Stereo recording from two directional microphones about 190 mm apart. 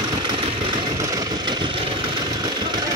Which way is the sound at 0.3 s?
25° right (ahead or behind).